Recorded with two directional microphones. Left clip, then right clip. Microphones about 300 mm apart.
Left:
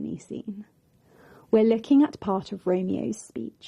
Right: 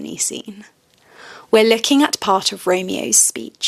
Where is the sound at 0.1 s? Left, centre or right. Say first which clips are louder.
Right 10 dB; centre.